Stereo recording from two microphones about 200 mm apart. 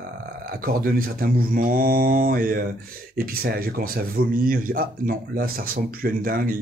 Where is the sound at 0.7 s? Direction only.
45° right (ahead or behind).